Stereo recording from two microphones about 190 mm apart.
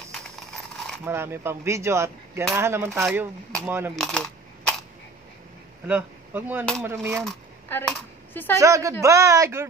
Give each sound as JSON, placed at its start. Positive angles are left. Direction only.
{"t": 1.0, "sound": "coin", "side_deg": -15}
{"t": 3.9, "sound": "speech", "side_deg": 0}
{"t": 5.9, "sound": "speech", "side_deg": -10}
{"t": 6.8, "sound": "coin", "side_deg": -10}
{"t": 7.2, "sound": "speech", "side_deg": 5}
{"t": 8.5, "sound": "coin", "side_deg": -15}